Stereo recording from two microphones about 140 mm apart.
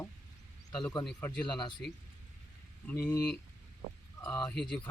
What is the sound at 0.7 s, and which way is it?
Speech, 5° left (ahead or behind).